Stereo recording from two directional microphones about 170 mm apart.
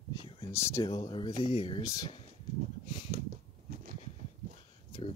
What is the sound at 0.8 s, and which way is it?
Speech, 30° left (ahead or behind).